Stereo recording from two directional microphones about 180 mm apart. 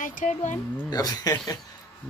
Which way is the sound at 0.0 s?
45° left (ahead or behind).